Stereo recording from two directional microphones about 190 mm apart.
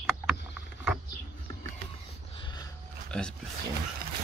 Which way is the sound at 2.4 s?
20° left (ahead or behind).